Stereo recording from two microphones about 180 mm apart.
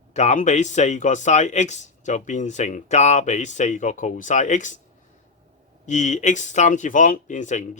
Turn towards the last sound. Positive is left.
turn(degrees=40)  # may be behind; listen again after turning